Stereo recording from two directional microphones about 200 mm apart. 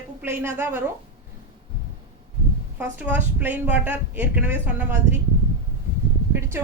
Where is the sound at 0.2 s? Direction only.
10° right (ahead or behind).